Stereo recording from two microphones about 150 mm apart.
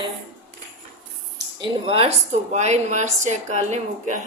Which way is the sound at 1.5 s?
35° right (ahead or behind).